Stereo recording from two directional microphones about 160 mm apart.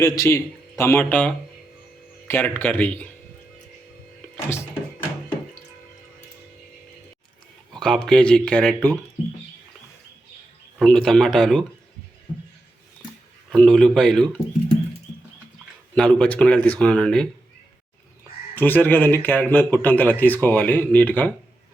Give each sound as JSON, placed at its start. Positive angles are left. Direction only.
{"t": 0.0, "sound": "a man's voice", "side_deg": 15}
{"t": 7.7, "sound": "speech", "side_deg": 5}
{"t": 10.8, "sound": "speech", "side_deg": 5}
{"t": 13.5, "sound": "speech", "side_deg": 5}
{"t": 16.0, "sound": "a man's voice", "side_deg": 5}
{"t": 18.5, "sound": "a man's voice", "side_deg": 10}